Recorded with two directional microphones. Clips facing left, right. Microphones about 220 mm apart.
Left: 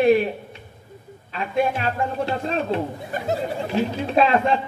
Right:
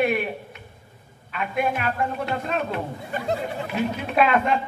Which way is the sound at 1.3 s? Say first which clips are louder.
Left 3 dB; 30° left (ahead or behind).